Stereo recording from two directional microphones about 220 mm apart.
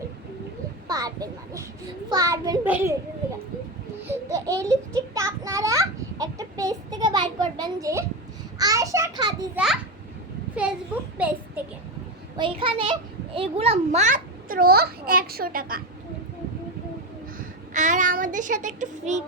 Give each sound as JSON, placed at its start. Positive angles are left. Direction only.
{"t": 0.9, "sound": "a sound", "side_deg": -15}
{"t": 2.0, "sound": "a child's voice", "side_deg": -15}
{"t": 4.0, "sound": "a child's voice", "side_deg": -15}
{"t": 10.5, "sound": "a child's voice", "side_deg": -5}
{"t": 12.4, "sound": "a child's voice", "side_deg": -25}
{"t": 17.7, "sound": "a child's voice", "side_deg": -35}